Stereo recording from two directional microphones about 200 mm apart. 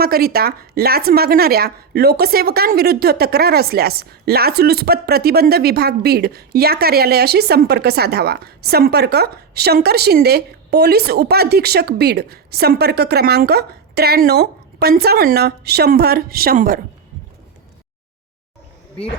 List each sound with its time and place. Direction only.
0.0 s a woman's voice: 50° right (ahead or behind)